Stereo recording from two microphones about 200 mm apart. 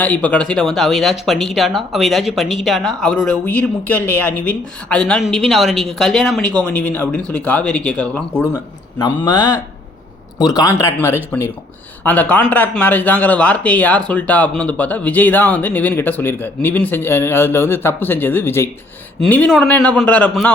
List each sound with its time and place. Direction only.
0.0 s speech: 5° left (ahead or behind)
9.0 s speech: 15° left (ahead or behind)